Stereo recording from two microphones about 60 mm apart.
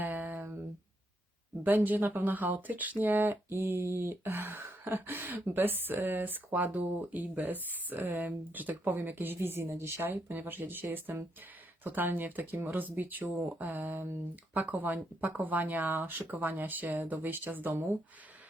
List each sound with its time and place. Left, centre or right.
0.0 s a sound: right
1.6 s speech: right
3.6 s speech: right